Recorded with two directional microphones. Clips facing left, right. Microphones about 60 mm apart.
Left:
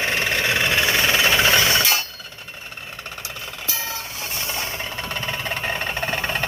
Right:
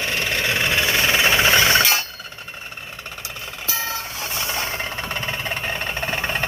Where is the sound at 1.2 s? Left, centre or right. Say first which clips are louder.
Right 1 dB; centre.